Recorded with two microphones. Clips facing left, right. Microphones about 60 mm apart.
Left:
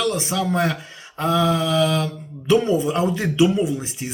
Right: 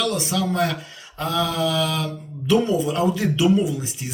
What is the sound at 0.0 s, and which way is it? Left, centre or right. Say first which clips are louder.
Speech: left 1 dB; left.